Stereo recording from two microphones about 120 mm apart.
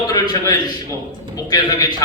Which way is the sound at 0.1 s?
35° left (ahead or behind).